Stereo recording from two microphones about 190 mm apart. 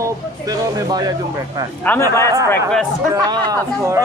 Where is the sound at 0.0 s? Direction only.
20° right (ahead or behind).